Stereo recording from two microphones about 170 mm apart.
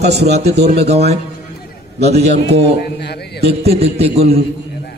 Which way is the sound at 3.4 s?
35° right (ahead or behind).